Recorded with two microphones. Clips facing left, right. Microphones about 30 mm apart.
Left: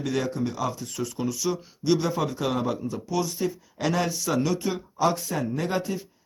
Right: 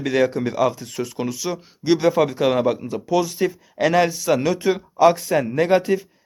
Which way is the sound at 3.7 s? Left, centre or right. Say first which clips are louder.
Right 9 dB; right.